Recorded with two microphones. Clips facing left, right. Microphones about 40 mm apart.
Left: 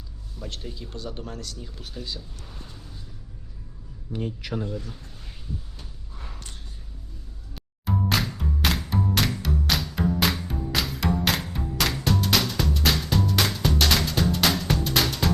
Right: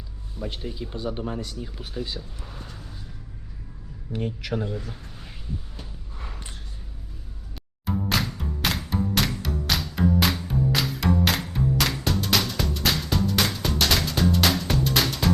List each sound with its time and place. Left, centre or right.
0.3 s speech: centre
4.1 s a man's voice: right
7.5 s music: centre